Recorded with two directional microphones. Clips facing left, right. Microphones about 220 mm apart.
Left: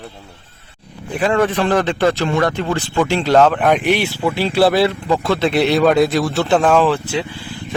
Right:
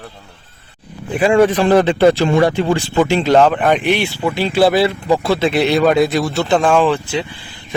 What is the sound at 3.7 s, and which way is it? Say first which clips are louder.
Speech: even; 5° left (ahead or behind).